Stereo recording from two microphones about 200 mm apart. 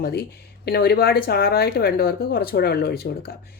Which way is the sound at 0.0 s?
50° left (ahead or behind).